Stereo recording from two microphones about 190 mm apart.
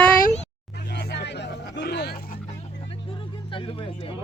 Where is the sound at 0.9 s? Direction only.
60° left (ahead or behind).